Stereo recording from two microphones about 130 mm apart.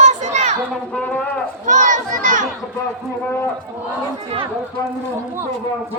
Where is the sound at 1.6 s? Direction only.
70° right (ahead or behind).